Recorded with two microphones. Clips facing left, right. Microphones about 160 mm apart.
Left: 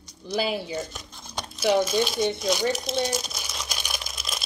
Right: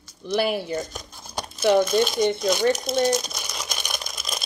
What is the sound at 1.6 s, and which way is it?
Speech, 50° right (ahead or behind).